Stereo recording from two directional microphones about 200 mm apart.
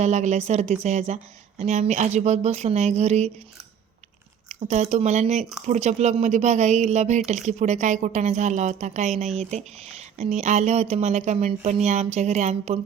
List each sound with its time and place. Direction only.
0.0 s speech: 35° right (ahead or behind)
4.4 s speech: 35° right (ahead or behind)